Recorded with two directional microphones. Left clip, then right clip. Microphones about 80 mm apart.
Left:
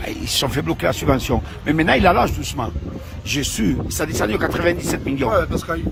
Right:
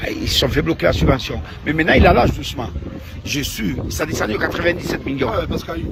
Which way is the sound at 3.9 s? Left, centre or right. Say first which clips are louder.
Right 4 dB; left.